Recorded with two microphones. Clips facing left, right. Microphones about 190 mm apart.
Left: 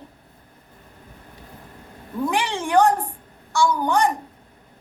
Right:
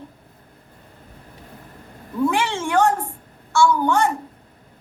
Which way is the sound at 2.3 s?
15° left (ahead or behind).